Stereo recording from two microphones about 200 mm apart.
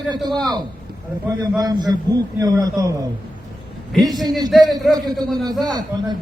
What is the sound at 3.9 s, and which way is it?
Speech, centre (ahead or behind).